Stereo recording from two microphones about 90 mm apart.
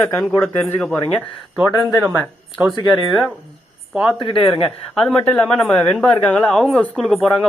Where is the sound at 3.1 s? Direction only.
Centre (ahead or behind).